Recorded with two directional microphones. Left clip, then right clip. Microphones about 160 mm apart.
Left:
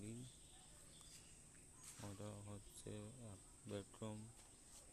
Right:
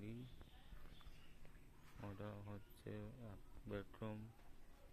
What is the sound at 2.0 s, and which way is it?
Speech, centre (ahead or behind).